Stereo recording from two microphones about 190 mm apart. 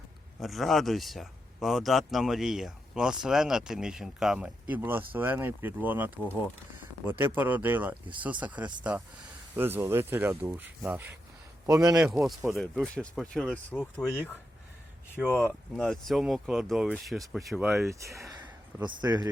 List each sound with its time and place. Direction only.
0.3 s speech: centre (ahead or behind)
7.1 s speech: 10° right (ahead or behind)
11.9 s speech: 5° right (ahead or behind)
15.3 s speech: 10° left (ahead or behind)
17.8 s speech: 15° right (ahead or behind)